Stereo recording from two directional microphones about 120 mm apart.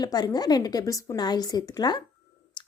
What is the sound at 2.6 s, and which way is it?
Clicking, 40° left (ahead or behind).